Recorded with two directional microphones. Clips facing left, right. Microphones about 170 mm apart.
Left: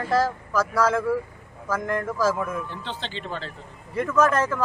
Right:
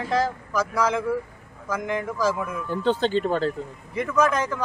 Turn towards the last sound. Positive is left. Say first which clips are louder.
# left 1 dB
turn(degrees=5)  # may be behind; listen again after turning